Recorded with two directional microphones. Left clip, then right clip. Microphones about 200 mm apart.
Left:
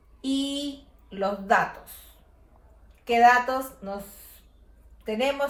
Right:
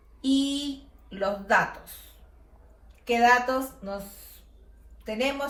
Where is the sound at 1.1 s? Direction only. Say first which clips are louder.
Left 1 dB; 25° left (ahead or behind).